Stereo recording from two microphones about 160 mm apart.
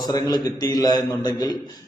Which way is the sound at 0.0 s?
25° left (ahead or behind).